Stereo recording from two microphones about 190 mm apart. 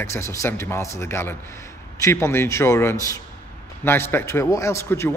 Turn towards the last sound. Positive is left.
turn(degrees=15)  # may be behind; listen again after turning